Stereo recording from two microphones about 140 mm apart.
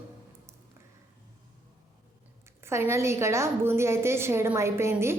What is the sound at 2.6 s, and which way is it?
A woman's voice, 20° right (ahead or behind).